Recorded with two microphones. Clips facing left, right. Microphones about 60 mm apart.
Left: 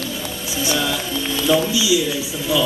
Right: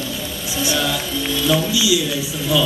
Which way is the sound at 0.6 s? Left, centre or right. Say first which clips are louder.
Even; left.